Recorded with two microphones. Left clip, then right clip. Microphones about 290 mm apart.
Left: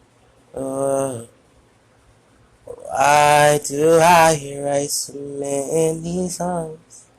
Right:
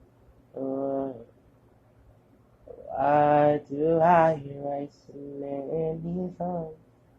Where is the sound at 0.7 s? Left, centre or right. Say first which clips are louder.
Left 10 dB; left.